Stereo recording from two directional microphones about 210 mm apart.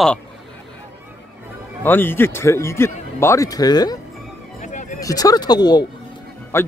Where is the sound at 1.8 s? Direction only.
10° left (ahead or behind).